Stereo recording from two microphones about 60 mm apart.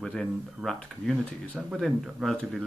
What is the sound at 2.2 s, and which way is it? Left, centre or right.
Speech, centre.